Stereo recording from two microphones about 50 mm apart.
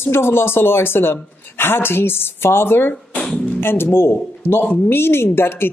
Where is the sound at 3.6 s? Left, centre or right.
Left.